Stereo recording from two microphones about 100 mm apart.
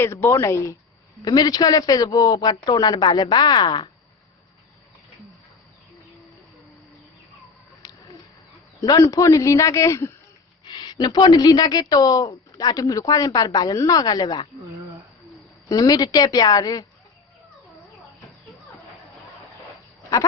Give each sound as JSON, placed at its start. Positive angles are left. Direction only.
{"t": 0.0, "sound": "speech", "side_deg": 25}
{"t": 7.8, "sound": "a sound", "side_deg": 40}
{"t": 9.0, "sound": "a woman's voice", "side_deg": 35}
{"t": 10.7, "sound": "a woman's voice", "side_deg": 40}
{"t": 15.7, "sound": "a woman's voice", "side_deg": 40}